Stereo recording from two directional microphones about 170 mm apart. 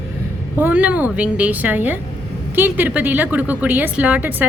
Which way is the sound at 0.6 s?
10° right (ahead or behind).